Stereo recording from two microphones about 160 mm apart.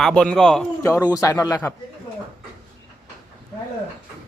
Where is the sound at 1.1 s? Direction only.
20° left (ahead or behind).